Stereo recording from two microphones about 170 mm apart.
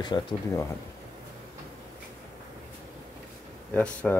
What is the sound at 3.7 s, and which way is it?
Speech, 10° left (ahead or behind).